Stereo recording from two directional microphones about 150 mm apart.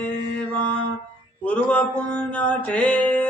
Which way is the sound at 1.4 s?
10° left (ahead or behind).